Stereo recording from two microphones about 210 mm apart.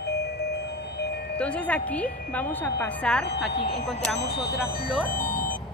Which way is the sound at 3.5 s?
30° left (ahead or behind).